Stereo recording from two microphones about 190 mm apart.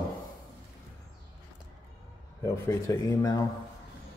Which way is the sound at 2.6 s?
15° left (ahead or behind).